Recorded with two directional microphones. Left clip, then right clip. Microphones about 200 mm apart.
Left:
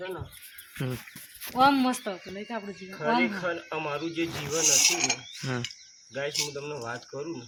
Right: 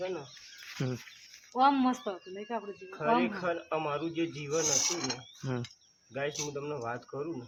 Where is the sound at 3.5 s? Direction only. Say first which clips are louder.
Left 1 dB; 5° right (ahead or behind).